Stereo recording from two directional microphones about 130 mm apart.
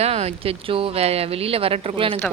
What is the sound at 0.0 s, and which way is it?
Speech, 55° right (ahead or behind).